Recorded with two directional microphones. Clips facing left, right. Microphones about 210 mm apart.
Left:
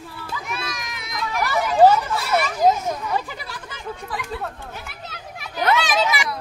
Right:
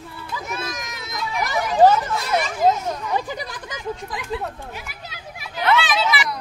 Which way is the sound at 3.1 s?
15° right (ahead or behind).